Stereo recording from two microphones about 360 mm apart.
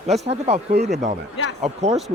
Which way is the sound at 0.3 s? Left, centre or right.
Centre.